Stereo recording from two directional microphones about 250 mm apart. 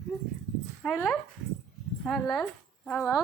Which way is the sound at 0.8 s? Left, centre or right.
Centre.